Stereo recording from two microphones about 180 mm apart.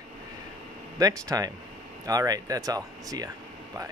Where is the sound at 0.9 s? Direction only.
20° right (ahead or behind).